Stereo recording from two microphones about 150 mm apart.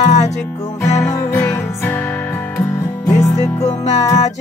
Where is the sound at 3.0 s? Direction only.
50° left (ahead or behind).